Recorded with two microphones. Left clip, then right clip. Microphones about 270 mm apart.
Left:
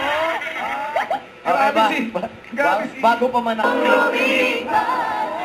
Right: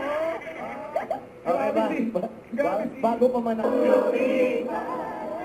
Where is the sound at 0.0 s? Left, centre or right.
Centre.